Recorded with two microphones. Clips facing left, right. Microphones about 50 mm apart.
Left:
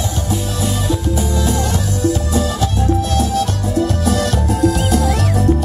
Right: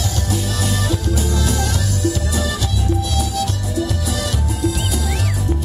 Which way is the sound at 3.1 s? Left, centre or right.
Left.